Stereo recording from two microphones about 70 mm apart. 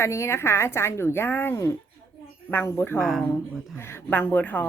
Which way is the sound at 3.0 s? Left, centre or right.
Centre.